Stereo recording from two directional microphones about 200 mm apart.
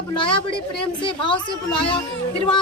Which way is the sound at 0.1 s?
25° left (ahead or behind).